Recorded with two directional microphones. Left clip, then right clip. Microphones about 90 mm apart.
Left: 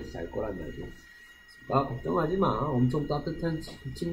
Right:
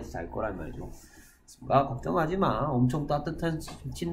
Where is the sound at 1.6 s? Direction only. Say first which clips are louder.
Right 3 dB; 15° right (ahead or behind).